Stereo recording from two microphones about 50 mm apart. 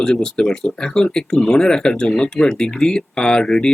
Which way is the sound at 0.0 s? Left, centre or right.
Centre.